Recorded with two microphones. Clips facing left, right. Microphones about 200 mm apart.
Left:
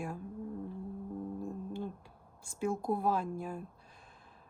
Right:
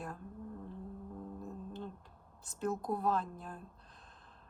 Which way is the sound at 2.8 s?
10° left (ahead or behind).